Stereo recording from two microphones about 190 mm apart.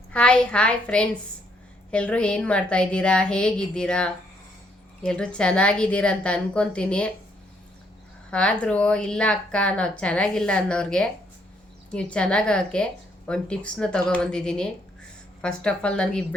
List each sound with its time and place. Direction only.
0.1 s a woman's voice: 5° left (ahead or behind)
8.3 s a woman's voice: 5° left (ahead or behind)
12.1 s a woman's voice: 5° left (ahead or behind)